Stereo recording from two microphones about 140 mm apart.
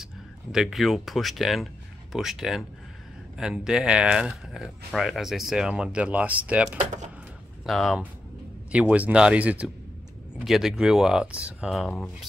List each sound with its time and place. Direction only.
0.0 s speech: 5° right (ahead or behind)
6.8 s a sound: 55° right (ahead or behind)
7.6 s speech: centre (ahead or behind)